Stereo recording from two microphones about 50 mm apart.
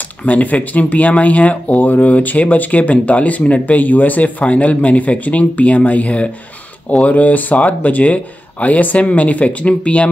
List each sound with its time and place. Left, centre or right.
0.2 s speech: left